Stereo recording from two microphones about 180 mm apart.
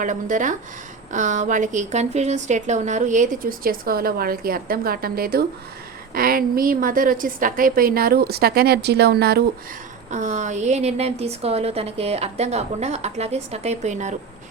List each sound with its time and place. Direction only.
0.0 s a woman's voice: 45° right (ahead or behind); by 9.4 s 65° right (ahead or behind)
10.1 s a woman's voice: 40° right (ahead or behind)